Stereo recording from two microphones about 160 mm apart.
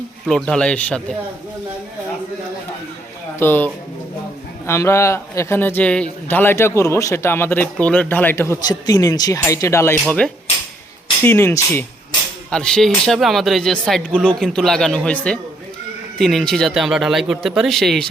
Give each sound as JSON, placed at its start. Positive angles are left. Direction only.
{"t": 0.3, "sound": "speech", "side_deg": 5}
{"t": 3.3, "sound": "a man's voice", "side_deg": 15}
{"t": 10.1, "sound": "a man's voice", "side_deg": 5}
{"t": 12.5, "sound": "speech", "side_deg": 5}